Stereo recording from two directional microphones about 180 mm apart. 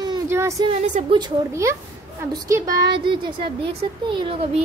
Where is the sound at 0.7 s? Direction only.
30° right (ahead or behind).